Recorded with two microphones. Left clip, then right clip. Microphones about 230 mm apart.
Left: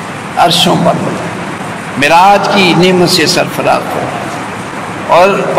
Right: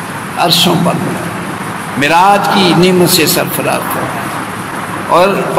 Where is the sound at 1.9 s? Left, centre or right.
Right.